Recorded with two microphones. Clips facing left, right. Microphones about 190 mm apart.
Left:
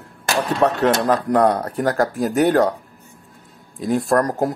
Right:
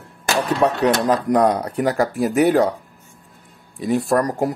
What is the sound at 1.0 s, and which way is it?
Speech, 15° right (ahead or behind).